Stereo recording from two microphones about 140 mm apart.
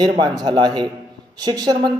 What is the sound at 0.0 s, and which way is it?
A man's voice, 30° right (ahead or behind).